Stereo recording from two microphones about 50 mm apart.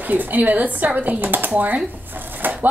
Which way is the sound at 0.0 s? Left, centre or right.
Right.